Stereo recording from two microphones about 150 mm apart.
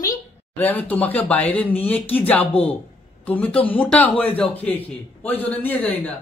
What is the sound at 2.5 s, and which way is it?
Speech, 40° left (ahead or behind).